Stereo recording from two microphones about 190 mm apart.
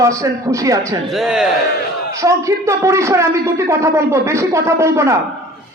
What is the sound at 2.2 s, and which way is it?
Speech, 15° right (ahead or behind).